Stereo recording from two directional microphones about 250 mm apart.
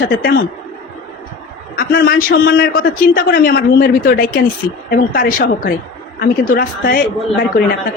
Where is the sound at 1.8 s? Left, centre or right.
Left.